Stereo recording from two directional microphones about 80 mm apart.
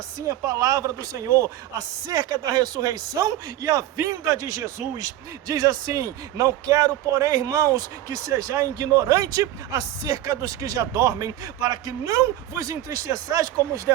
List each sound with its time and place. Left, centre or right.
0.2 s speech: right